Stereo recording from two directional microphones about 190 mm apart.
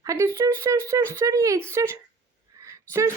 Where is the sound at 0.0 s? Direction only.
15° right (ahead or behind).